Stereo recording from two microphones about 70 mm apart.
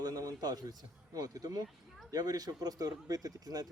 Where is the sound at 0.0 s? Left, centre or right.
Right.